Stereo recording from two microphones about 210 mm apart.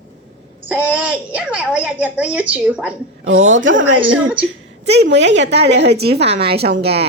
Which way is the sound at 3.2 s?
65° right (ahead or behind).